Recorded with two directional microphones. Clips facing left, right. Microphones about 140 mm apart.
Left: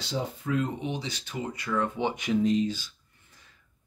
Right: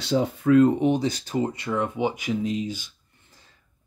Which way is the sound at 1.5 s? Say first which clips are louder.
Right 3 dB; 20° right (ahead or behind).